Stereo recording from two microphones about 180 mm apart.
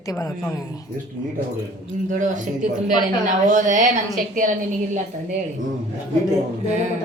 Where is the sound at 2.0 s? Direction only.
45° right (ahead or behind).